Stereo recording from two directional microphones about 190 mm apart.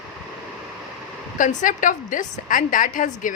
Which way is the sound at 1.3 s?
45° left (ahead or behind).